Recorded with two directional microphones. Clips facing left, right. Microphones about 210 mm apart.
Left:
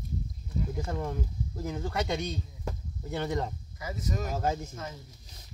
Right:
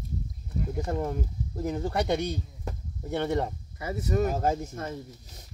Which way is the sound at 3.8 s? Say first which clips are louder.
Right 8 dB; 60° right (ahead or behind).